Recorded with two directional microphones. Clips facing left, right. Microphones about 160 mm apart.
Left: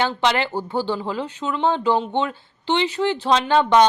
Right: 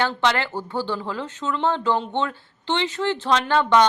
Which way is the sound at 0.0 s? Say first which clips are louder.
Left 2 dB; 15° left (ahead or behind).